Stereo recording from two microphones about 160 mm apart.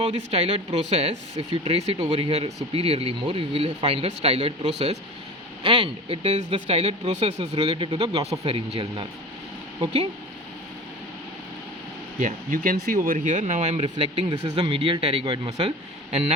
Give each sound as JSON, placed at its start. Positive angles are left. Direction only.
{"t": 0.0, "sound": "speech", "side_deg": -40}
{"t": 12.2, "sound": "speech", "side_deg": -60}
{"t": 13.8, "sound": "speech", "side_deg": -30}
{"t": 14.3, "sound": "speech", "side_deg": -45}
{"t": 14.6, "sound": "speech", "side_deg": -35}